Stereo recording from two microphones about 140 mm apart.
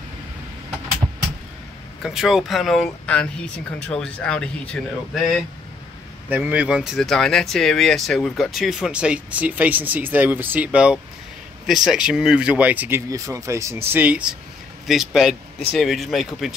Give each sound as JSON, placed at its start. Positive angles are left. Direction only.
{"t": 2.0, "sound": "speech", "side_deg": 0}
{"t": 6.2, "sound": "speech", "side_deg": -10}